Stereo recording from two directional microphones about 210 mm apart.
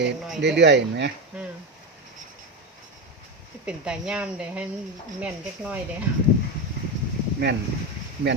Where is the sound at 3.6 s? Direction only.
5° right (ahead or behind).